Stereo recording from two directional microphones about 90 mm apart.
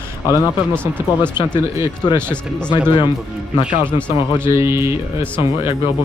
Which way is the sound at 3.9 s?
15° left (ahead or behind).